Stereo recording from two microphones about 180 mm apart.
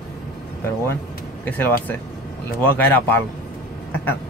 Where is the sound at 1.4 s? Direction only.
10° left (ahead or behind).